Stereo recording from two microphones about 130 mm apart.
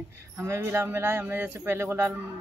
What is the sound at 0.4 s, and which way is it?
Speech, 20° right (ahead or behind).